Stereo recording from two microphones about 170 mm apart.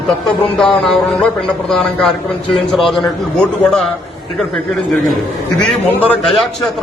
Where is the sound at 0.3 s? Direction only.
5° left (ahead or behind).